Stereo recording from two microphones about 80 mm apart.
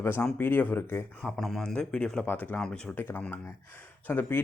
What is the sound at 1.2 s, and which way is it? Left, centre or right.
Speech, centre.